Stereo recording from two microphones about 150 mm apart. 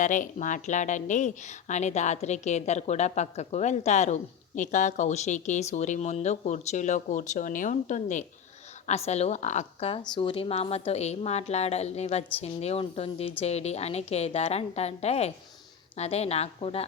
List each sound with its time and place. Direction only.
0.0 s a woman's voice: 60° left (ahead or behind)
10.0 s a woman's voice: 35° left (ahead or behind)